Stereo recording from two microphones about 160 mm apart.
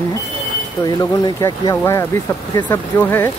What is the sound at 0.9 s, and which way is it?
Speech, 20° left (ahead or behind).